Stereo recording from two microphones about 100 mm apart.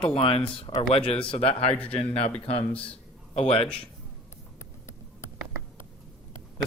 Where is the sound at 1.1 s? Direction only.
75° left (ahead or behind).